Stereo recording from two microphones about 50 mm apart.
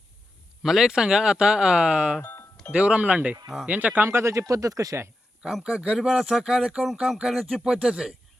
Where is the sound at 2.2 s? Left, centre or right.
Left.